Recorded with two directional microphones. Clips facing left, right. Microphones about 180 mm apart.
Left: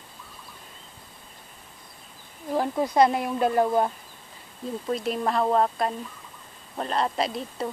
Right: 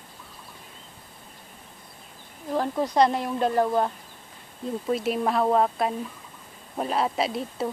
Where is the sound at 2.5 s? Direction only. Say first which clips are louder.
Left 1 dB; 10° left (ahead or behind).